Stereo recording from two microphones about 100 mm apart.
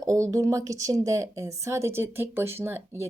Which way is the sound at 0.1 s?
30° right (ahead or behind).